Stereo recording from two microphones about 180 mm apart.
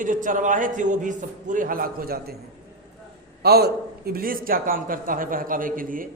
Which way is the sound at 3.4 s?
60° right (ahead or behind).